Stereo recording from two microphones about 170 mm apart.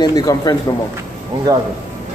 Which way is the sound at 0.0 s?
20° left (ahead or behind).